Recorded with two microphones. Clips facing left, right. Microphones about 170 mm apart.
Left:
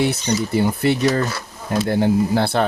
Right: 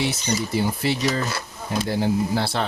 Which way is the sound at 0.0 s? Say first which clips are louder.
Left 5 dB; 60° left (ahead or behind).